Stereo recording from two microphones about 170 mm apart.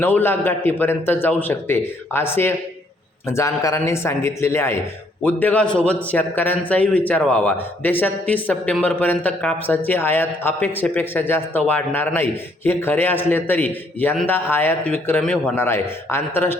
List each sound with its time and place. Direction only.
0.0 s a man's voice: 10° left (ahead or behind)